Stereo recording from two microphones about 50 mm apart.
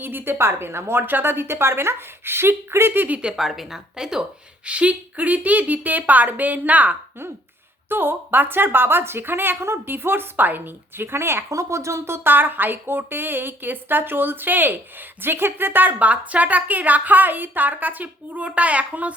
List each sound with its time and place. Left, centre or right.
0.0 s a woman's voice: right
1.0 s a woman's voice: right
3.3 s speech: centre
4.6 s a woman's voice: right
7.9 s a woman's voice: right
11.4 s speech: right
12.3 s a woman's voice: right